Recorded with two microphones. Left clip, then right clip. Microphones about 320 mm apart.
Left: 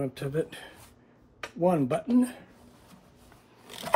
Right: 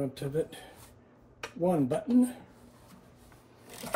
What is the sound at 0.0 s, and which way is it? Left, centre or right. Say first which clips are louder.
Speech: left 1 dB; centre.